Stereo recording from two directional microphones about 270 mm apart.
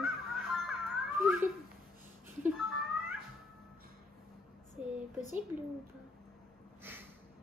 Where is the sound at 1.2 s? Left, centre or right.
Centre.